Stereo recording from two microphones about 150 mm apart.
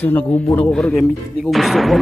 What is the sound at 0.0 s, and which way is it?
Speech, 10° left (ahead or behind).